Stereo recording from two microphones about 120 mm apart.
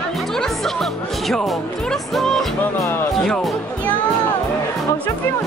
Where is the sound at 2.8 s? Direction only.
20° left (ahead or behind).